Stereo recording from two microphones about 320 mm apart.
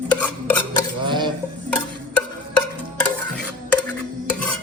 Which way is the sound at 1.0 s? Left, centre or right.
Centre.